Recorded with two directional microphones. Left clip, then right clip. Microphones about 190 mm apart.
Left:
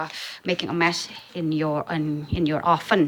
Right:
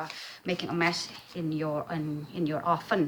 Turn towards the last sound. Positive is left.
turn(degrees=40)  # may be behind; listen again after turning